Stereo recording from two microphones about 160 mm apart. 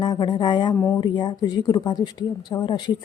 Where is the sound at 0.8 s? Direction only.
15° left (ahead or behind).